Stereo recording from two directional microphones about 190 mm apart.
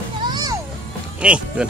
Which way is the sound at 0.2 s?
20° right (ahead or behind).